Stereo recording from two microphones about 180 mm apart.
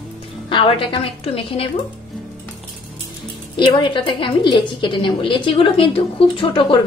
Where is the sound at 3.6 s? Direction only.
25° left (ahead or behind).